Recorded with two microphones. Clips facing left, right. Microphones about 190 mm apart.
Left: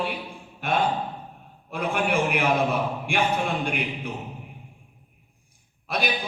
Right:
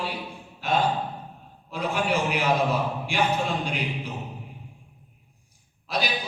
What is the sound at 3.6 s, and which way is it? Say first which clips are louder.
Speech: left 1 dB; 55° left (ahead or behind).